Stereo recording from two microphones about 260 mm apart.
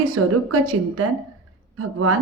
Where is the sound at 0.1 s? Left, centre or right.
Right.